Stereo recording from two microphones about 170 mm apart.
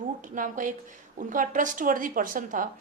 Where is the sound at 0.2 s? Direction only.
50° right (ahead or behind).